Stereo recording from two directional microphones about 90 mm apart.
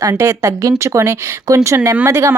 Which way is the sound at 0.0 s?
35° right (ahead or behind).